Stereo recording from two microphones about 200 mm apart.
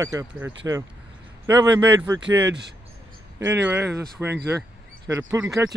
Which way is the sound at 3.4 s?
10° right (ahead or behind).